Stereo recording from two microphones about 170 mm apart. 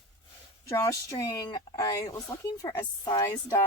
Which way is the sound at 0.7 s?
20° left (ahead or behind).